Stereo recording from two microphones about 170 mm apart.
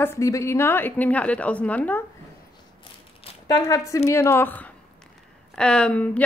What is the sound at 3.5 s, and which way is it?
Speech, 20° left (ahead or behind).